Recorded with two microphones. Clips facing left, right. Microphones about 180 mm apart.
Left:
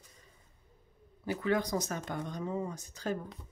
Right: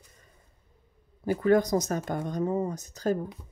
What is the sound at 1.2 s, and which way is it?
Speech, 45° right (ahead or behind).